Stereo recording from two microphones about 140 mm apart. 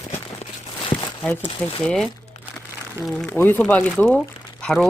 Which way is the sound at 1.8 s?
5° left (ahead or behind).